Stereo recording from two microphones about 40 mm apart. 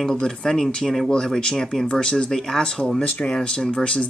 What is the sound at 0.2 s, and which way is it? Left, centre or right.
Speech, centre.